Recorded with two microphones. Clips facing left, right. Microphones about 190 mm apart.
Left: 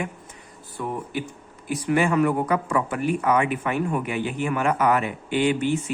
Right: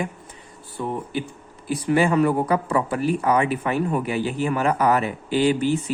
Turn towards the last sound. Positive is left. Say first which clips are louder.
# right 2 dB
turn(degrees=-35)  # may be behind; listen again after turning